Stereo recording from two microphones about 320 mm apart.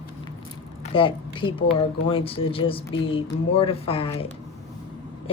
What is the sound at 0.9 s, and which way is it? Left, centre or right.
Speech, centre.